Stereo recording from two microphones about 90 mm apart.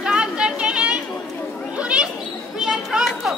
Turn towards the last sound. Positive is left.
turn(degrees=-5)  # may be behind; listen again after turning